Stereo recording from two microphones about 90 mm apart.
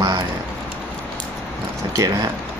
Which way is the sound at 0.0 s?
50° right (ahead or behind).